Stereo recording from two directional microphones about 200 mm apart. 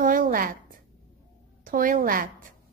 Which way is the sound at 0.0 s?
45° right (ahead or behind).